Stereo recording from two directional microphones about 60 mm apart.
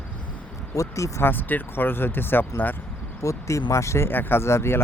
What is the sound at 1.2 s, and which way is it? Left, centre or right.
Speech, left.